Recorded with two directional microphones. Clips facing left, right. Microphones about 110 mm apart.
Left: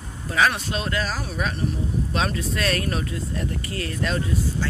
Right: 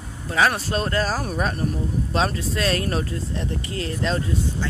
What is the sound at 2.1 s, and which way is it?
Speech, 30° right (ahead or behind).